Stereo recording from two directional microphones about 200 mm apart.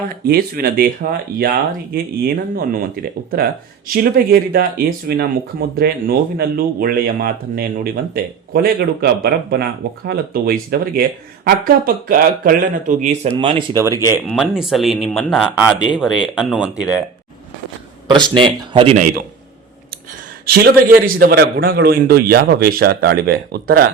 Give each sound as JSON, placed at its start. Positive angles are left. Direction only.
{"t": 0.1, "sound": "speech", "side_deg": -50}
{"t": 13.3, "sound": "speech", "side_deg": -25}
{"t": 13.7, "sound": "speech", "side_deg": -15}
{"t": 14.3, "sound": "speech", "side_deg": 0}
{"t": 18.1, "sound": "speech", "side_deg": -25}
{"t": 20.5, "sound": "speech", "side_deg": -50}